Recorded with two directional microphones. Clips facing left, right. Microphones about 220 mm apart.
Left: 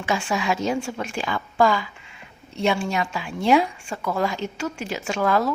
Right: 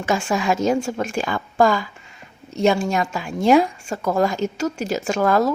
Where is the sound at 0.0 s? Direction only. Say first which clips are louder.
Right 3 dB; 45° right (ahead or behind).